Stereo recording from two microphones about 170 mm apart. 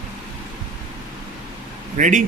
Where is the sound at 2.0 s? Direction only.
50° right (ahead or behind).